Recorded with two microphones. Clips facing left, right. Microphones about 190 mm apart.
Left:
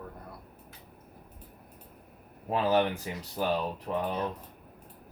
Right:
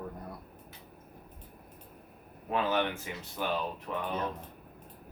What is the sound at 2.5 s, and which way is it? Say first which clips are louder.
Speech: left 4 dB; 35° left (ahead or behind).